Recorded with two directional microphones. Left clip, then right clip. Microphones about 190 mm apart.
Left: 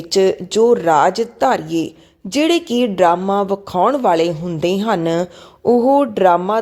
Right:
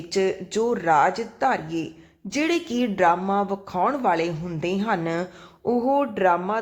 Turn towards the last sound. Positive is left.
turn(degrees=35)  # may be behind; listen again after turning